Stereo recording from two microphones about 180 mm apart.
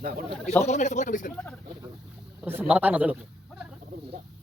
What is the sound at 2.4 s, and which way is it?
Speech, 10° right (ahead or behind).